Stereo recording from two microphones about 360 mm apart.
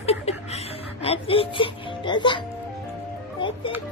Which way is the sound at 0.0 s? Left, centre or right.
Centre.